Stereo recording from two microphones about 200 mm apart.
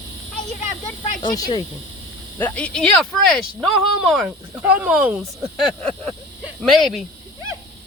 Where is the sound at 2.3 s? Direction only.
10° left (ahead or behind); by 5.1 s 5° right (ahead or behind).